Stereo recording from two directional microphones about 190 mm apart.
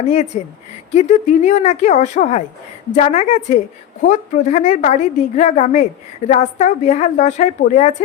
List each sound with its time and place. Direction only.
0.1 s a woman's voice: 40° left (ahead or behind)